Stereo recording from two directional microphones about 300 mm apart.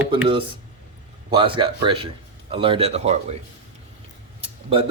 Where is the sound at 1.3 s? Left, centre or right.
Centre.